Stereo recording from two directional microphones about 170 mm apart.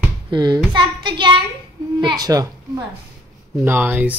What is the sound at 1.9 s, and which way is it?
Speech, 25° right (ahead or behind).